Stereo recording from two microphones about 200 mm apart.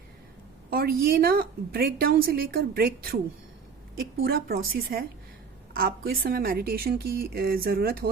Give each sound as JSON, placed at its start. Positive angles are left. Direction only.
{"t": 0.7, "sound": "a woman's voice", "side_deg": -50}